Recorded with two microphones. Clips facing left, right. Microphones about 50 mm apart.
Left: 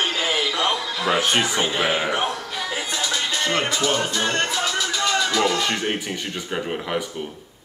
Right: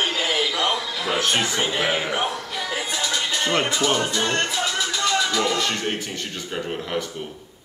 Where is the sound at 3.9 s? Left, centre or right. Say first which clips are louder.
Even; centre.